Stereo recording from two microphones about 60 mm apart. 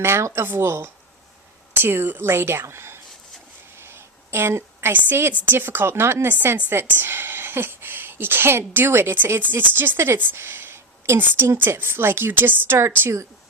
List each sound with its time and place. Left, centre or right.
0.0 s a woman's voice: right
3.8 s a sound: right
5.5 s a woman's voice: right
6.2 s a woman's voice: right